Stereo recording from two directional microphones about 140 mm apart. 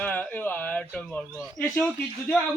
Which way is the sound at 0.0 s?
10° left (ahead or behind).